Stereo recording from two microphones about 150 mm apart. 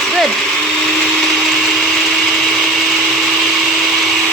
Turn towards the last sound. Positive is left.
turn(degrees=0)  # may be behind; listen again after turning